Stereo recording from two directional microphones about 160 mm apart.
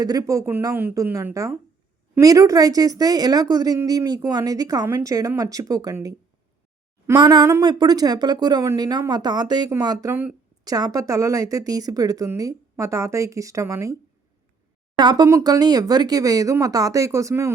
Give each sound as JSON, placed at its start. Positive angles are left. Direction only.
{"t": 0.0, "sound": "a woman's voice", "side_deg": -25}
{"t": 7.2, "sound": "a woman's voice", "side_deg": -25}
{"t": 14.9, "sound": "a woman's voice", "side_deg": -25}